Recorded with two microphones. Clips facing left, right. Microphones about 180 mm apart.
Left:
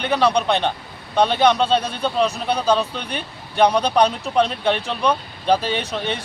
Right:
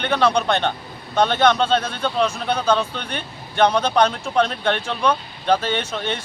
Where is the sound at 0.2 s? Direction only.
35° left (ahead or behind).